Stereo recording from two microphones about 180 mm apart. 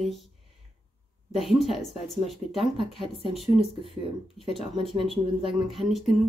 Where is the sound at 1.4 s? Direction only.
Centre (ahead or behind).